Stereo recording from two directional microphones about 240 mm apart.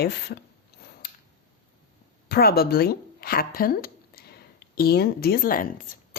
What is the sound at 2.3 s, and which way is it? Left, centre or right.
A woman's voice, left.